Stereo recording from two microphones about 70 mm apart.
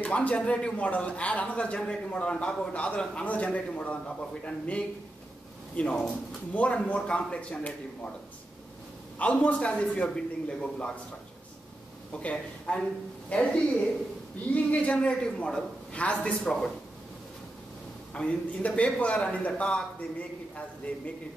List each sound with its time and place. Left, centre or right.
0.0 s a man's voice: centre
9.2 s a man's voice: centre
12.1 s a man's voice: centre
18.1 s a man's voice: centre